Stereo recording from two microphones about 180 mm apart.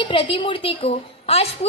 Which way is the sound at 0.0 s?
30° left (ahead or behind).